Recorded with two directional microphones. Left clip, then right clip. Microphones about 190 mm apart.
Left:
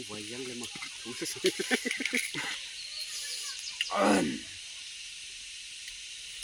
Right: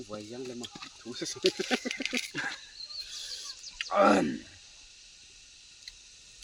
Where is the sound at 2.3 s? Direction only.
5° right (ahead or behind).